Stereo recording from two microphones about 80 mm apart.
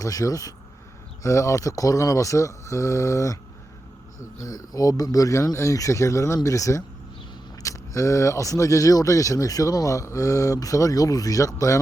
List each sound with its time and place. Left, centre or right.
0.0 s speech: left
4.4 s speech: left